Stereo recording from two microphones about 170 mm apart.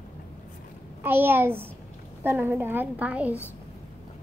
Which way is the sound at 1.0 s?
10° right (ahead or behind).